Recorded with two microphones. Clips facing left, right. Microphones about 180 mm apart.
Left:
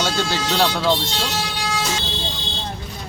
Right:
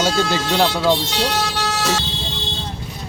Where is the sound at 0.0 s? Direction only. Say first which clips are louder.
Right 3 dB; 10° right (ahead or behind).